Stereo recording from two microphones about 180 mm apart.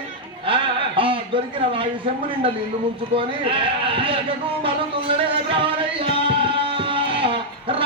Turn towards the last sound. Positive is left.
turn(degrees=-30)  # may be behind; listen again after turning